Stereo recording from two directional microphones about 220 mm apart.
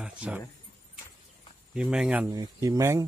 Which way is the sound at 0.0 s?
5° right (ahead or behind).